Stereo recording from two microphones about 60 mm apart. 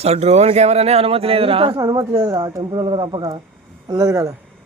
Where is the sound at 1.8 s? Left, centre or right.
Right.